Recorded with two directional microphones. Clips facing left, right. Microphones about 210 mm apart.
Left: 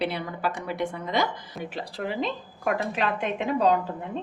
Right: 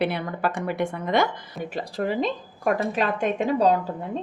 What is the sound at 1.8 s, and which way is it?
A woman's voice, 45° right (ahead or behind).